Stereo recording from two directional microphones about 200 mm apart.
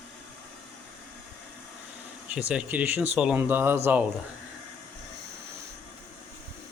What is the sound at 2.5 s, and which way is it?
Speech, 5° right (ahead or behind).